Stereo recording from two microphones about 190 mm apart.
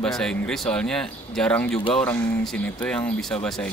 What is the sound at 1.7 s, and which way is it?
Speech, 25° left (ahead or behind).